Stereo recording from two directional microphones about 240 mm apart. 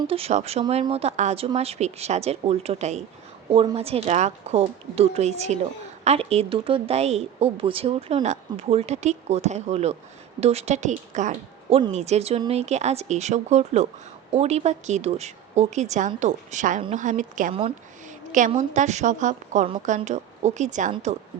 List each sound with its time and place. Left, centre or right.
0.1 s speech: right